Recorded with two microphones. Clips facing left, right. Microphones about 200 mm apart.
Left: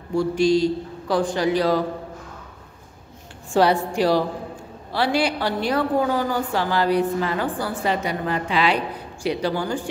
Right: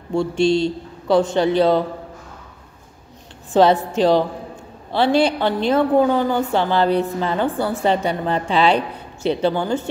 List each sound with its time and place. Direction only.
0.1 s a woman's voice: 25° right (ahead or behind)
3.5 s a woman's voice: 20° right (ahead or behind)